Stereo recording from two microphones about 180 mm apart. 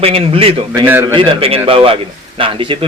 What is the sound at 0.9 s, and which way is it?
Speech, 10° right (ahead or behind).